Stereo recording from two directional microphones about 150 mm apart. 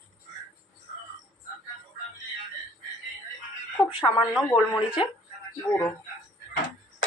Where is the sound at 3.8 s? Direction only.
30° left (ahead or behind).